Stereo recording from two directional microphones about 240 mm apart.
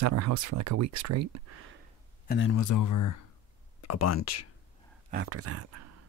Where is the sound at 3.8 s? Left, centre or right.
Left.